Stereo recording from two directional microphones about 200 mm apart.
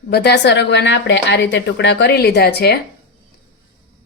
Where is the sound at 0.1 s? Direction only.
55° left (ahead or behind).